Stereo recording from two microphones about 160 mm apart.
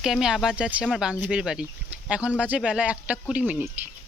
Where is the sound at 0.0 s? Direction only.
5° right (ahead or behind).